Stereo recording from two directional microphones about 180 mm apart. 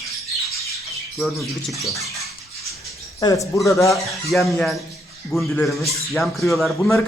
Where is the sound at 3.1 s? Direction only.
20° left (ahead or behind).